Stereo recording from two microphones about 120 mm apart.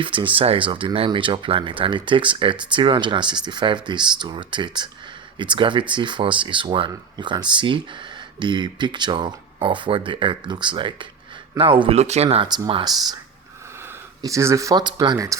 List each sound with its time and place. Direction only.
0.0 s speech: 45° right (ahead or behind)
11.9 s speech: 65° right (ahead or behind)
12.5 s speech: 40° right (ahead or behind)
14.2 s speech: 25° right (ahead or behind)